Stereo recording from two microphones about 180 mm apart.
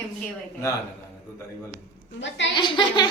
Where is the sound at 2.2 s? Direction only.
85° left.